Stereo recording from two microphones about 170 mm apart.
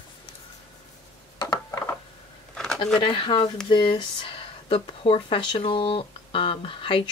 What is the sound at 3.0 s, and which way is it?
Speech, 30° left (ahead or behind).